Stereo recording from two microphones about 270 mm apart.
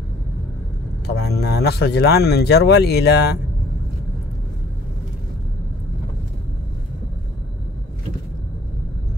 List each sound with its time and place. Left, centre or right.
1.0 s speech: left